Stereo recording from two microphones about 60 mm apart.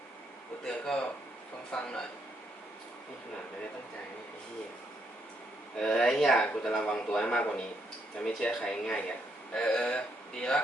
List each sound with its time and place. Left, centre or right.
0.6 s speech: centre
5.8 s speech: centre